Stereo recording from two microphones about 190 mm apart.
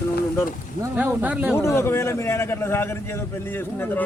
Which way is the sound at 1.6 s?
15° left (ahead or behind).